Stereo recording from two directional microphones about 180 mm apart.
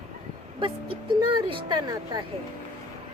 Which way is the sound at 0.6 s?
30° right (ahead or behind).